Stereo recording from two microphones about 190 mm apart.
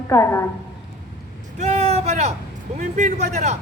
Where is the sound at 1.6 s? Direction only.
35° right (ahead or behind).